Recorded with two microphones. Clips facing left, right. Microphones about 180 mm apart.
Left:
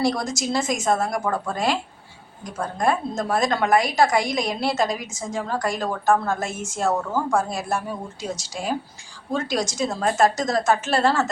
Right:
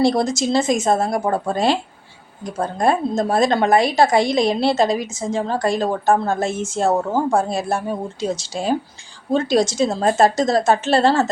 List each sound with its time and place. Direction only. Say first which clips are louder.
0.0 s speech: right 6 dB; 25° right (ahead or behind)